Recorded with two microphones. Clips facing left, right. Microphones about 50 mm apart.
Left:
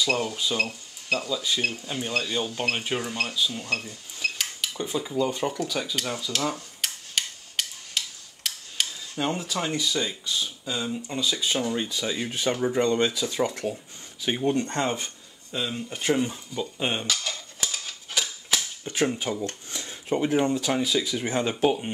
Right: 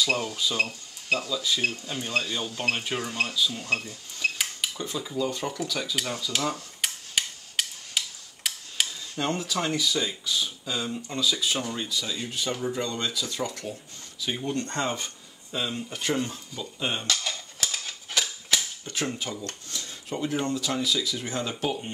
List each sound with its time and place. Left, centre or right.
0.1 s speech: centre
3.6 s cash register: centre
4.7 s speech: centre
6.8 s a sound: centre
8.5 s tick-tock: centre
9.1 s speech: centre
17.0 s typewriter: centre
18.9 s speech: centre